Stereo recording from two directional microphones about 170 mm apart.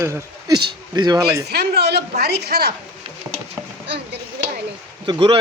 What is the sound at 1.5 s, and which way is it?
Speech, 70° right (ahead or behind).